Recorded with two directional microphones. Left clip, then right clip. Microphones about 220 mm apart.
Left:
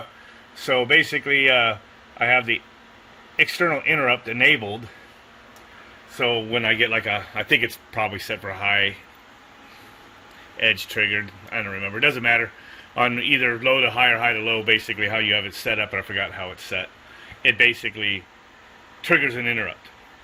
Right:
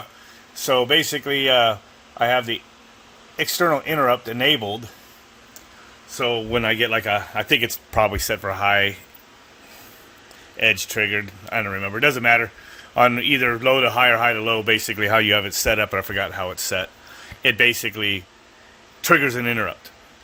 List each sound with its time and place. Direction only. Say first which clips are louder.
0.6 s speech: even; 20° right (ahead or behind)
3.9 s speech: right 3 dB; 5° right (ahead or behind)
4.4 s a man's voice: left 1 dB; 20° right (ahead or behind)
6.1 s a man's voice: even; 15° right (ahead or behind); by 9.0 s 30° right (ahead or behind)
10.6 s speech: right 1 dB; 25° right (ahead or behind)